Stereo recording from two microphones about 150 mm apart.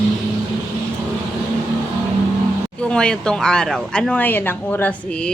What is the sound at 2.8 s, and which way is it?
Speech, 5° left (ahead or behind).